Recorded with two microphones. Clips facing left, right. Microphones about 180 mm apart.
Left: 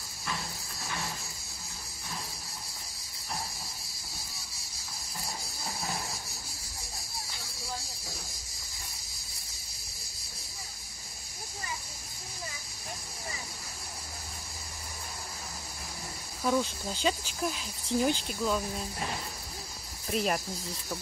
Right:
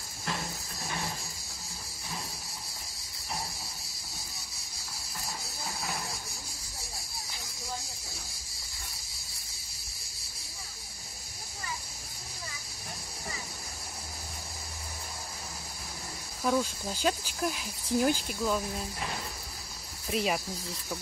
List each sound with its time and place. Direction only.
16.4 s speech: 5° right (ahead or behind)
20.1 s speech: centre (ahead or behind)